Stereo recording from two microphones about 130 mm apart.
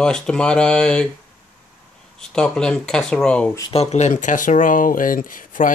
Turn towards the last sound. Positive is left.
turn(degrees=90)